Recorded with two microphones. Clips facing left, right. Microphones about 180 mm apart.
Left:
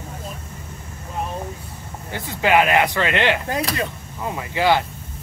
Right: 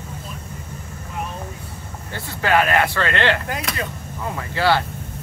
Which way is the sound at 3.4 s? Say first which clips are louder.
Left 4 dB; 30° left (ahead or behind).